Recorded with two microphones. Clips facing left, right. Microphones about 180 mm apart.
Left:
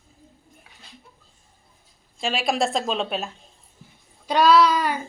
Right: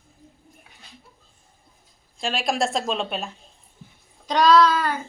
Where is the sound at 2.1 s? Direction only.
Centre (ahead or behind).